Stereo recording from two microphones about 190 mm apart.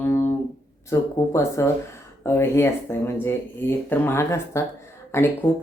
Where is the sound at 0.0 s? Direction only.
15° left (ahead or behind).